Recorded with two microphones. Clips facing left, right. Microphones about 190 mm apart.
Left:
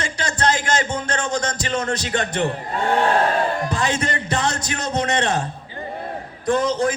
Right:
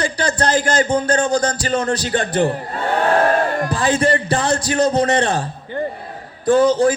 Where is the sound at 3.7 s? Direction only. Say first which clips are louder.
Right 6 dB; 35° right (ahead or behind).